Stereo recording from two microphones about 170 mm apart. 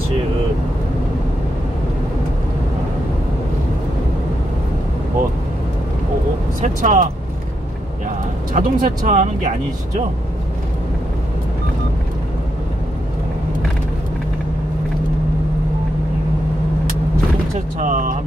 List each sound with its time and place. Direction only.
6.6 s speech: 50° right (ahead or behind)
8.5 s speech: 50° right (ahead or behind)
17.7 s speech: 50° right (ahead or behind)